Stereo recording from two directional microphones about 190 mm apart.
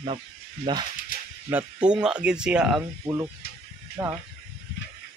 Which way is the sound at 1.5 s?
10° right (ahead or behind).